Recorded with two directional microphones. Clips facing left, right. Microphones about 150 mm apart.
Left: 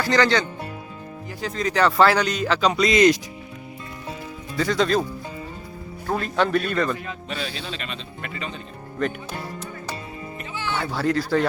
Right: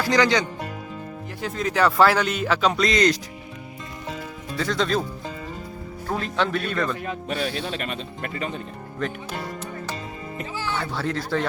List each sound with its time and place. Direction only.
0.0 s speech: 10° right (ahead or behind)
4.5 s speech: centre (ahead or behind)
6.1 s speech: 5° left (ahead or behind)
7.0 s speech: 55° right (ahead or behind)
10.8 s speech: centre (ahead or behind)